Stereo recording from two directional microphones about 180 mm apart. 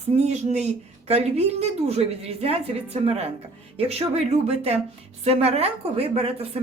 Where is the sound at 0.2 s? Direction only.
40° right (ahead or behind).